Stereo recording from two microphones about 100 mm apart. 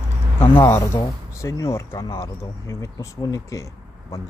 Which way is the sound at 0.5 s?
25° left (ahead or behind).